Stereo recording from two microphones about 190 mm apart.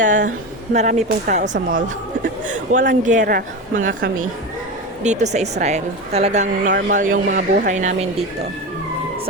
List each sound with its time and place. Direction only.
0.0 s a woman's voice: 45° right (ahead or behind)
2.5 s a woman's voice: 45° right (ahead or behind)